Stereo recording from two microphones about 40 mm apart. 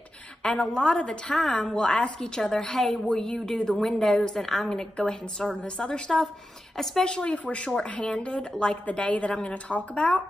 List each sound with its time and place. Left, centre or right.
0.4 s a woman's voice: left
6.8 s a woman's voice: centre
7.1 s a woman's voice: left